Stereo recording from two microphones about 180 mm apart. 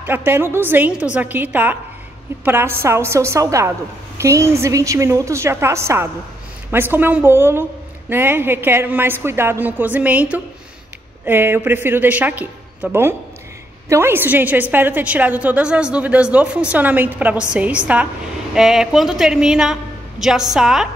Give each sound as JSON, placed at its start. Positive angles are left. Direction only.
{"t": 0.0, "sound": "a woman's voice", "side_deg": -10}